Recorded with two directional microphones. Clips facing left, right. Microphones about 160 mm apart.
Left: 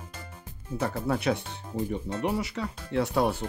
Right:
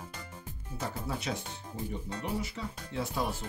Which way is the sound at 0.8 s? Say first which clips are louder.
Left 8 dB; 60° left (ahead or behind).